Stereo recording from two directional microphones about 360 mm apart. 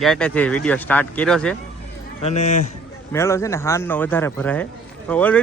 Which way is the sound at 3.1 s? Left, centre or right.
Centre.